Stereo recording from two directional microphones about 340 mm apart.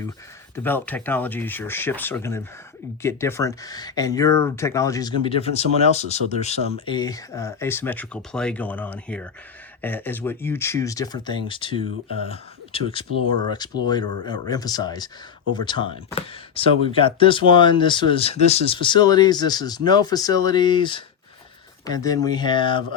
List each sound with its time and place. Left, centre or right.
0.5 s speech: centre
13.2 s speech: right
13.5 s speech: centre